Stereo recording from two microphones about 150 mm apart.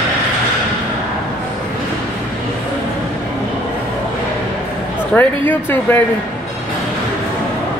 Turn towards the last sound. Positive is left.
turn(degrees=15)  # may be behind; listen again after turning